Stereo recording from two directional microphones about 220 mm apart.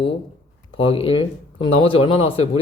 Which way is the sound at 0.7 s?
25° left (ahead or behind).